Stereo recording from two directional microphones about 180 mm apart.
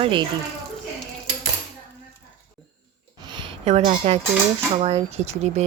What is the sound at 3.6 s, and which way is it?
Speech, 35° right (ahead or behind).